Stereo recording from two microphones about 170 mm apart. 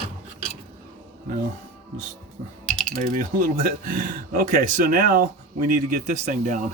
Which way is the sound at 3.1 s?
55° right (ahead or behind).